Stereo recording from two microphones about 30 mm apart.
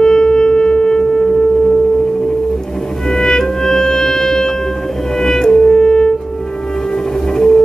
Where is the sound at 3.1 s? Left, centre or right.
Centre.